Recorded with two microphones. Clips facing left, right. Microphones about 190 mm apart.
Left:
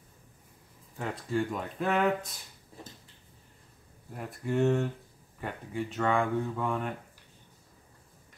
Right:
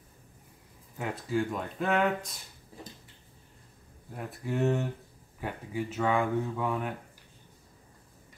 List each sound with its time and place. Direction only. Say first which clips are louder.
0.9 s speech: right 1 dB; 5° right (ahead or behind)
4.1 s speech: left 2 dB; centre (ahead or behind)